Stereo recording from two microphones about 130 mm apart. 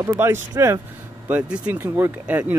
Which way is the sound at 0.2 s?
20° right (ahead or behind).